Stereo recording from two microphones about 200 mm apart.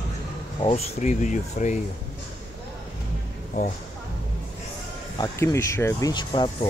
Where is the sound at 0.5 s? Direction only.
30° left (ahead or behind).